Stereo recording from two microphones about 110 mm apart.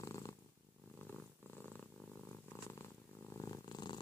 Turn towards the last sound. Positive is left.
turn(degrees=40)  # may be behind; listen again after turning